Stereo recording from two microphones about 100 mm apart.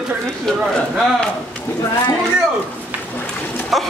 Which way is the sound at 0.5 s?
5° left (ahead or behind).